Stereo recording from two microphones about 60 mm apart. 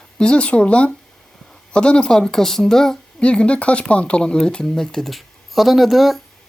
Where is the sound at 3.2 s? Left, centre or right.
Centre.